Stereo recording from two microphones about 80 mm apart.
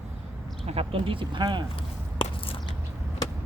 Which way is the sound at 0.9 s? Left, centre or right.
Right.